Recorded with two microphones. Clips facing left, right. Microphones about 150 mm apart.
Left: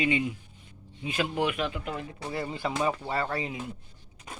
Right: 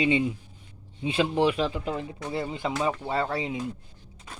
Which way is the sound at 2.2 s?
15° right (ahead or behind).